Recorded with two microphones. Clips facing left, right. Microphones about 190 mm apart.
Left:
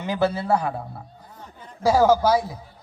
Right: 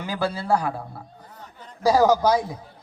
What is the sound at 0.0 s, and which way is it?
Speech, 20° left (ahead or behind).